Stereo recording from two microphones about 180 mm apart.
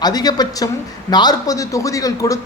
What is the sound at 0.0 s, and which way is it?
A man's voice, 20° left (ahead or behind).